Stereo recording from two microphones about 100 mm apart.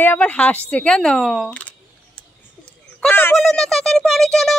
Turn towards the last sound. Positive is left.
turn(degrees=5)  # may be behind; listen again after turning